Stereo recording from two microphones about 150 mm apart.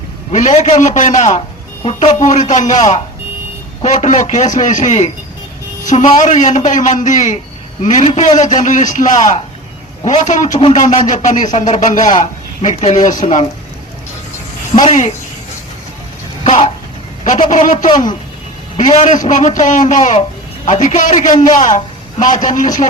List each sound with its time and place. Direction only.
0.3 s a man's voice: 50° left (ahead or behind)
14.8 s speech: 50° left (ahead or behind)
16.4 s a sound: 45° left (ahead or behind)
17.2 s a man's voice: 55° left (ahead or behind)
19.0 s a man's voice: 55° left (ahead or behind)